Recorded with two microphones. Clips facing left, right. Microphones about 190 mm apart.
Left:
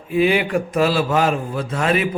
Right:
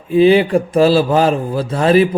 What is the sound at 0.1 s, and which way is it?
A man's voice, 30° right (ahead or behind).